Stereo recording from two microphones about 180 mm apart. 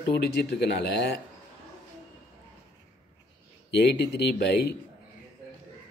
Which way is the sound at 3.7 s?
70° left (ahead or behind).